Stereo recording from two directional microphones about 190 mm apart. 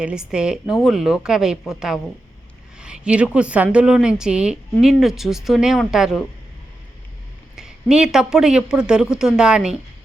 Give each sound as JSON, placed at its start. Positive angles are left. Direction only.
{"t": 0.0, "sound": "a woman's voice", "side_deg": -5}
{"t": 7.5, "sound": "a woman's voice", "side_deg": -5}